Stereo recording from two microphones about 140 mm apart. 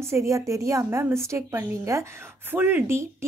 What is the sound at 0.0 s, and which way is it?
A woman's voice, 20° right (ahead or behind).